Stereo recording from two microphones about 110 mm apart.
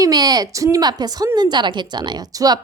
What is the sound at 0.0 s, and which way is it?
A woman's voice, 35° right (ahead or behind).